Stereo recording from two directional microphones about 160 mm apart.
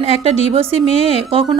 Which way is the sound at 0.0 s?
40° right (ahead or behind).